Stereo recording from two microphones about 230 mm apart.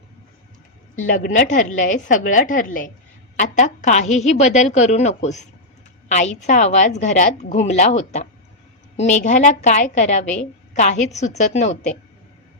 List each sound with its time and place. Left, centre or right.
0.9 s a woman's voice: left